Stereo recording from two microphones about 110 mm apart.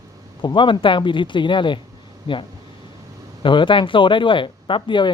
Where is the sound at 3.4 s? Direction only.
50° left (ahead or behind).